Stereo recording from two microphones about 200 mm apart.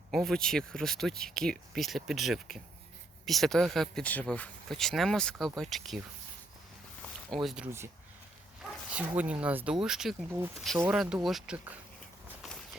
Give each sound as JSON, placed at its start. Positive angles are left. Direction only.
{"t": 0.1, "sound": "speech", "side_deg": 0}
{"t": 7.3, "sound": "speech", "side_deg": 0}
{"t": 9.0, "sound": "speech", "side_deg": -5}